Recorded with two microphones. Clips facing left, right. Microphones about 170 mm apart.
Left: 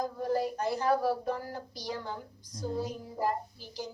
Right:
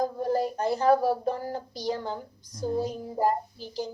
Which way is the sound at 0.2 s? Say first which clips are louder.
Right 4 dB; 25° right (ahead or behind).